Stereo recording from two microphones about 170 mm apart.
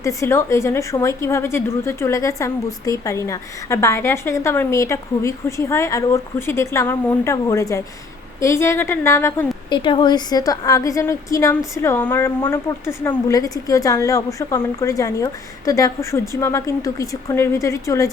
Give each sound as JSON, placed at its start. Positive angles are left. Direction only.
{"t": 0.0, "sound": "a woman's voice", "side_deg": 15}
{"t": 9.6, "sound": "a woman's voice", "side_deg": 30}